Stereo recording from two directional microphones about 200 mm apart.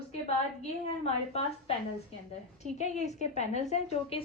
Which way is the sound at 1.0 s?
30° left (ahead or behind).